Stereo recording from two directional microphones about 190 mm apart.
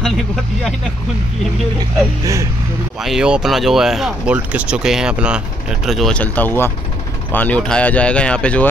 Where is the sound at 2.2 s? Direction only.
15° right (ahead or behind).